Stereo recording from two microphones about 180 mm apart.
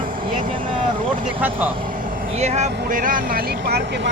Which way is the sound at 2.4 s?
40° right (ahead or behind).